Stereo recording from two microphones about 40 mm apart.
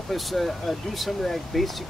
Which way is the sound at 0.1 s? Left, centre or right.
Centre.